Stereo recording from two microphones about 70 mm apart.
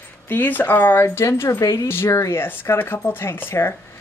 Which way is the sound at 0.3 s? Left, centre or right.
Left.